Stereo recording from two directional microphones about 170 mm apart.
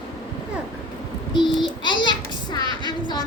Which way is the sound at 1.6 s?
25° left (ahead or behind).